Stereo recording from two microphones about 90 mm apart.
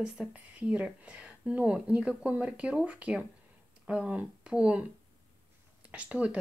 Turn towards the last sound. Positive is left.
turn(degrees=-10)  # may be behind; listen again after turning